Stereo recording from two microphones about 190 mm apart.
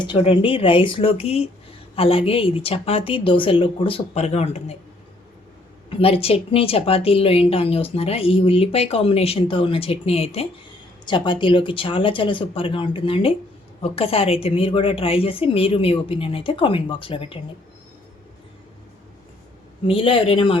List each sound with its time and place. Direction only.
0.0 s a woman's voice: 25° left (ahead or behind)
5.9 s a woman's voice: 30° left (ahead or behind)
19.9 s a woman's voice: 30° left (ahead or behind)